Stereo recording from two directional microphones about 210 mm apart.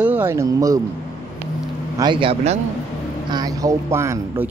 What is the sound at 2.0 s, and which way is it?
Speech, 20° right (ahead or behind).